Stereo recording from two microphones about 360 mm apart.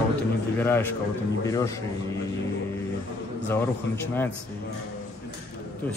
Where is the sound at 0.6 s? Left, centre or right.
Centre.